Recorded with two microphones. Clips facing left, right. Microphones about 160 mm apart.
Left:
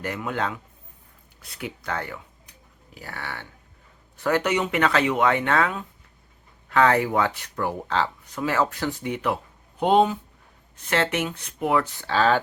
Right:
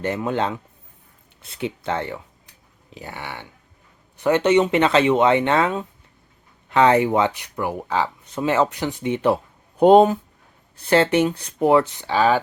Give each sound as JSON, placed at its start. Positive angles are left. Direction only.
{"t": 0.0, "sound": "speech", "side_deg": -30}
{"t": 8.3, "sound": "speech", "side_deg": -25}
{"t": 9.7, "sound": "speech", "side_deg": -45}
{"t": 10.8, "sound": "speech", "side_deg": -30}